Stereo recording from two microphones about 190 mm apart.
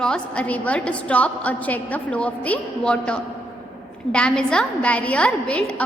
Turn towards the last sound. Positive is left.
turn(degrees=5)  # may be behind; listen again after turning